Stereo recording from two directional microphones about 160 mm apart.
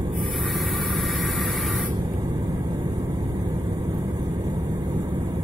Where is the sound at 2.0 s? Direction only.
25° right (ahead or behind).